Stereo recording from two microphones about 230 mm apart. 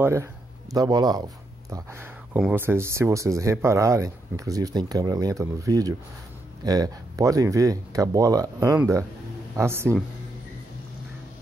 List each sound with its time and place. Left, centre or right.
0.0 s speech: centre